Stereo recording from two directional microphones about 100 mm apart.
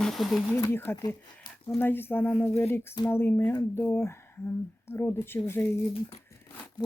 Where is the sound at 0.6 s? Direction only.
25° left (ahead or behind).